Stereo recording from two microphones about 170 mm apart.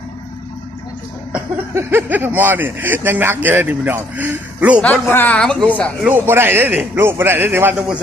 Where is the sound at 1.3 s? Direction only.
10° right (ahead or behind).